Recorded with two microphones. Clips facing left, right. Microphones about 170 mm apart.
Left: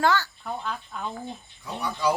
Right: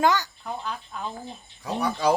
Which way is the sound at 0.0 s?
15° right (ahead or behind).